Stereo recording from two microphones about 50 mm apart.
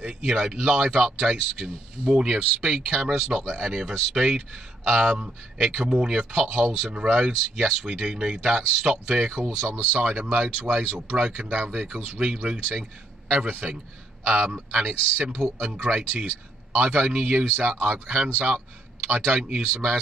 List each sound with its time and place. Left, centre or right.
0.0 s speech: centre
9.4 s a man's voice: right
9.8 s a man's voice: right
13.6 s speech: centre
14.2 s a man's voice: right
17.5 s speech: right
18.0 s a man's voice: centre